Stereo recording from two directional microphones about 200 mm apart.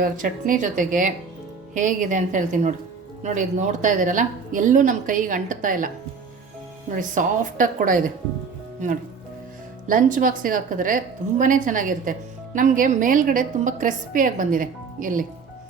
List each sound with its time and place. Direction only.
0.0 s a woman's voice: 40° right (ahead or behind)
6.9 s speech: 40° right (ahead or behind)
9.8 s a woman's voice: 40° right (ahead or behind)